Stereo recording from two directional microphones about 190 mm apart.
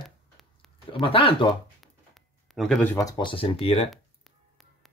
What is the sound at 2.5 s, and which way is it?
Speech, centre (ahead or behind).